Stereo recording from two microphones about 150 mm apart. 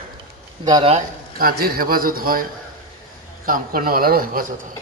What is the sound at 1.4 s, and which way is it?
A man's voice, 85° right.